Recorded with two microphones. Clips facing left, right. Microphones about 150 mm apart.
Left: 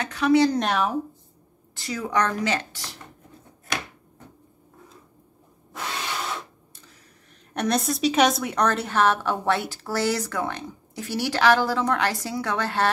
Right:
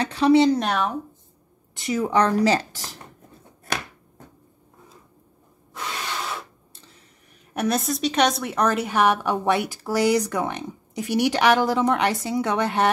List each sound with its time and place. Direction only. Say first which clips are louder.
0.0 s speech: right 2 dB; 30° right (ahead or behind)
0.6 s speech: even; centre (ahead or behind)
1.8 s speech: right 4 dB; 25° right (ahead or behind); by 3.0 s 40° right (ahead or behind)
7.5 s a woman's voice: right 1 dB; 5° right (ahead or behind); by 12.9 s 20° right (ahead or behind)